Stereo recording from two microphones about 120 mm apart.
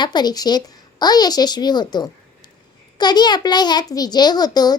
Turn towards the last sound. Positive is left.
turn(degrees=35)  # may be behind; listen again after turning